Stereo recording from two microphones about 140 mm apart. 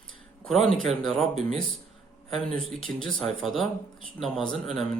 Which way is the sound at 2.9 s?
15° left (ahead or behind).